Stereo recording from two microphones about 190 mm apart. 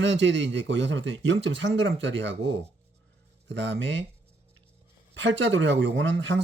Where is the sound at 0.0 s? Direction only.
70° right (ahead or behind).